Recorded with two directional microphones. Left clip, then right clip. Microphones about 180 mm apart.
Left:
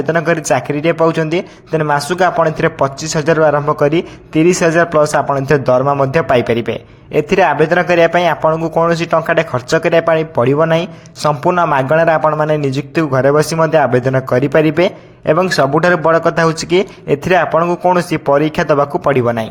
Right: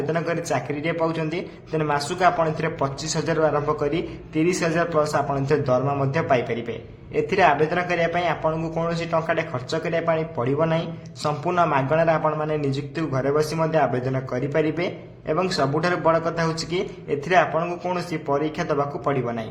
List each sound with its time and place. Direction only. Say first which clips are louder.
0.1 s a man's voice: left 13 dB; 45° left (ahead or behind)